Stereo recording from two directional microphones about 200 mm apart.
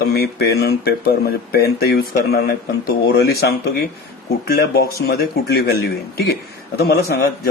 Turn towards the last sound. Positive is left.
turn(degrees=50)  # may be behind; listen again after turning